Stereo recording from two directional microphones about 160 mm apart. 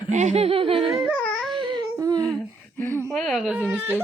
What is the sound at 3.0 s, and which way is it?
Baby cry, centre (ahead or behind).